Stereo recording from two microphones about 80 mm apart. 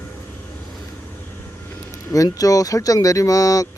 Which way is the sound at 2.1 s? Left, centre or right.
Left.